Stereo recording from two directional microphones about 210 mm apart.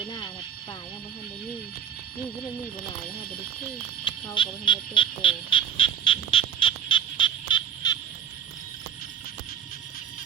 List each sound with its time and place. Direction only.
4.0 s frog: 25° left (ahead or behind)